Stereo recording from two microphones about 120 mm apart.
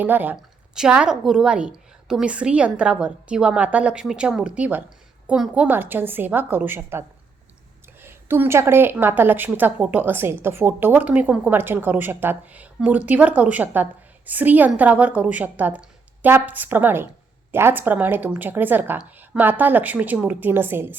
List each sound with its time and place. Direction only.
0.0 s a woman's voice: 15° right (ahead or behind)
8.0 s a woman's voice: 20° right (ahead or behind)